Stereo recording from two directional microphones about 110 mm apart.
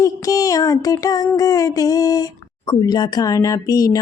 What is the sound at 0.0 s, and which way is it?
Mantra, 30° left (ahead or behind).